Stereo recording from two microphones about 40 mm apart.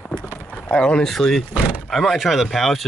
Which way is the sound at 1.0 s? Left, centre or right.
Centre.